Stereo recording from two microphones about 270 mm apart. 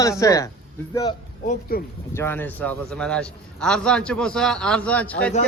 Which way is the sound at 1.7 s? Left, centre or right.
Left.